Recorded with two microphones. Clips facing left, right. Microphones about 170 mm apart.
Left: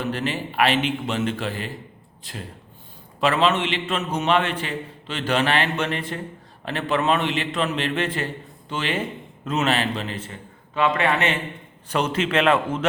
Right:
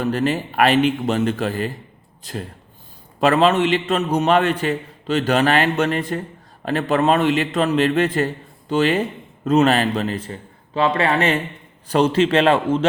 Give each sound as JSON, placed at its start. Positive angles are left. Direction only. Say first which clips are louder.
{"t": 0.0, "sound": "a man's voice", "louder": "right 6 dB", "side_deg": -45}